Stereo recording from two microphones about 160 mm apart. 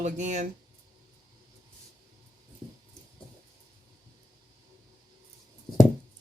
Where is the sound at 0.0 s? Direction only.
45° right (ahead or behind).